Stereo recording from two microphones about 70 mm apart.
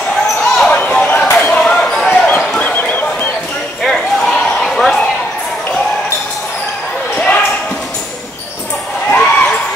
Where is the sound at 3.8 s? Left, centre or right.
Centre.